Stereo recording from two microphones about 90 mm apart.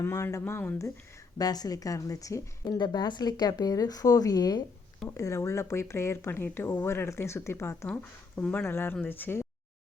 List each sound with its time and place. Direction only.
0.0 s speech: 35° left (ahead or behind)
1.4 s speech: 45° left (ahead or behind)
2.7 s speech: 55° left (ahead or behind)
5.0 s speech: 35° left (ahead or behind)
8.4 s speech: 20° left (ahead or behind)